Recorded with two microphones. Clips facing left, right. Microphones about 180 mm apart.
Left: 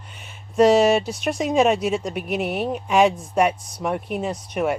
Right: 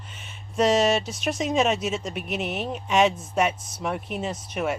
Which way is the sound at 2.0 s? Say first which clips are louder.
Left 5 dB; centre (ahead or behind).